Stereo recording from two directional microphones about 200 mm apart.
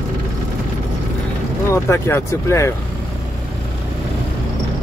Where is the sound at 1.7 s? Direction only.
15° left (ahead or behind).